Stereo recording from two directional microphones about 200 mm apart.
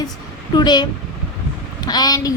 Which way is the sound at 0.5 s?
20° left (ahead or behind).